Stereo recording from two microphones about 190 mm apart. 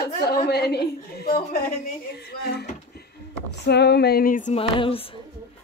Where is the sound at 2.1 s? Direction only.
55° left (ahead or behind); by 4.6 s 40° left (ahead or behind).